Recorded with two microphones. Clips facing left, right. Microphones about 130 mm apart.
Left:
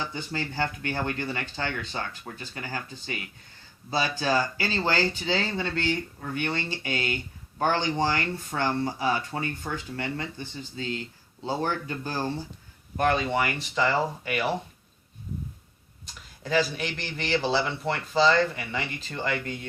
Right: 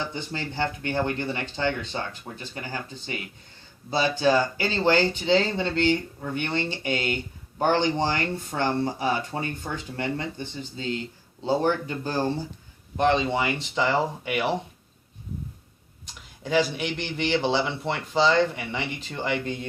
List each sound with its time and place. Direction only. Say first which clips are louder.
0.0 s speech: right 1 dB; 25° right (ahead or behind)
16.4 s speech: right 2 dB; 20° right (ahead or behind)